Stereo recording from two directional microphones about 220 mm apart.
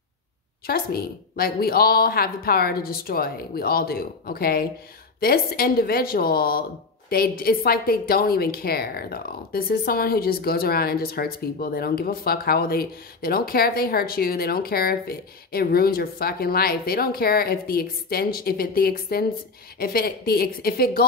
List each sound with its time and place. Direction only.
0.7 s speech: 45° left (ahead or behind)